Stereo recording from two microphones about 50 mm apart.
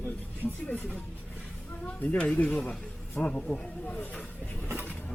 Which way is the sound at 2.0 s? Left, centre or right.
Left.